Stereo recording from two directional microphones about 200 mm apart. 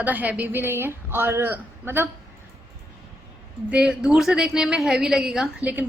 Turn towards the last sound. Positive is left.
turn(degrees=-5)  # may be behind; listen again after turning